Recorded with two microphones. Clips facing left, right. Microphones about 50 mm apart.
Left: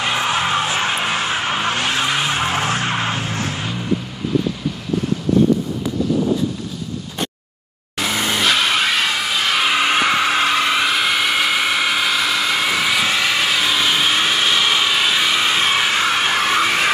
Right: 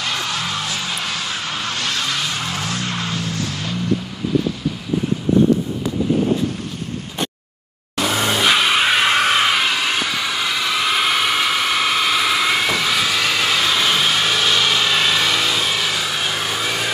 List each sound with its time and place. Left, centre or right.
0.0 s vehicle: left
8.5 s music: centre
9.1 s a sound: right
9.7 s vehicle: left
10.0 s vehicle: left
10.9 s vehicle: centre
12.7 s vehicle: centre
15.4 s vehicle: left